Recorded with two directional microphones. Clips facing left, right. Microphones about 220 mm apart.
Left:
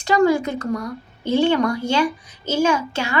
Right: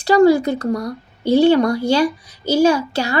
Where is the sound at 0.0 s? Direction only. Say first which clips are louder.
Right 5 dB; 35° right (ahead or behind).